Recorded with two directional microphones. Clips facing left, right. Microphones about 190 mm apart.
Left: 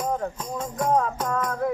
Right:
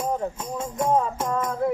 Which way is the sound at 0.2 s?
25° right (ahead or behind).